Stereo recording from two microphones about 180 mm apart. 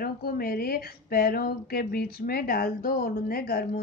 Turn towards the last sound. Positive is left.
turn(degrees=60)  # may be behind; listen again after turning